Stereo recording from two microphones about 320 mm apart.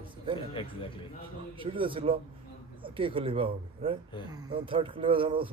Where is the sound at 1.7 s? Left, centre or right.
Centre.